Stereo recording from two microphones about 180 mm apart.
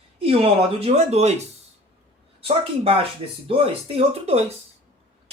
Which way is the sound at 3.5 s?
35° right (ahead or behind).